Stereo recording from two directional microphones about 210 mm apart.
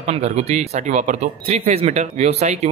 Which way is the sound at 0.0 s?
30° right (ahead or behind).